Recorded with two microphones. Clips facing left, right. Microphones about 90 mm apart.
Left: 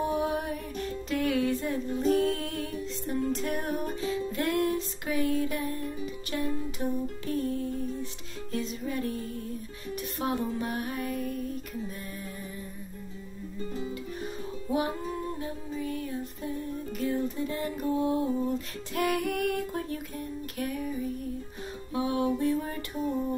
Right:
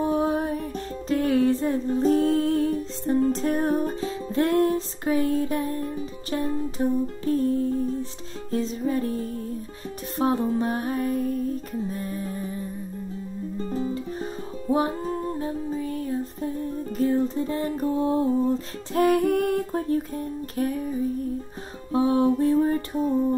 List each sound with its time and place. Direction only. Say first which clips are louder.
0.0 s music: right 5 dB; 35° right (ahead or behind)
13.7 s music: right 7 dB; 40° right (ahead or behind)
21.9 s music: right 8 dB; 35° right (ahead or behind)